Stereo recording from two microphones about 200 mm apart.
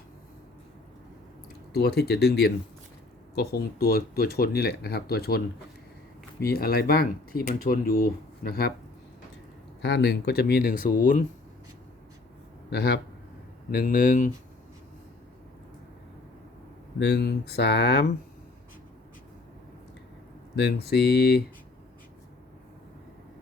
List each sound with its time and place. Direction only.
1.7 s speech: 50° left (ahead or behind)
6.4 s speech: 50° left (ahead or behind)
9.8 s speech: 60° left (ahead or behind); by 11.3 s 40° left (ahead or behind)
12.7 s speech: 55° left (ahead or behind)
17.0 s speech: 55° left (ahead or behind)
20.6 s speech: 55° left (ahead or behind)